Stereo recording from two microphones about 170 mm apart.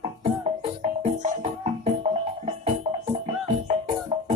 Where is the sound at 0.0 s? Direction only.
40° right (ahead or behind).